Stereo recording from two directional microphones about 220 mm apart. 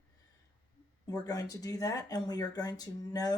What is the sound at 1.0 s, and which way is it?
Speech, 15° left (ahead or behind).